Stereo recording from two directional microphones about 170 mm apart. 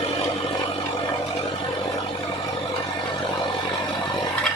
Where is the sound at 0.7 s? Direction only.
35° left (ahead or behind).